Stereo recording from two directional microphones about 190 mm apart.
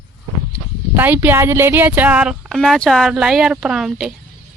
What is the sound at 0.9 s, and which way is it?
Speech, 10° right (ahead or behind).